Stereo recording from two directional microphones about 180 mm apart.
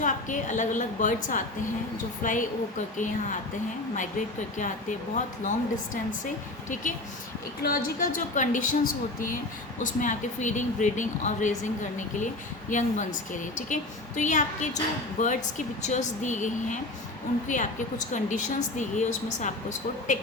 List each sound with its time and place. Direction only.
0.0 s a woman's voice: 45° left (ahead or behind)
4.5 s a woman's voice: 45° left (ahead or behind)